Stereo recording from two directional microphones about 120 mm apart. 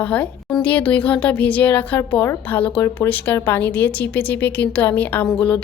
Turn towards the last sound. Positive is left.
turn(degrees=10)  # may be behind; listen again after turning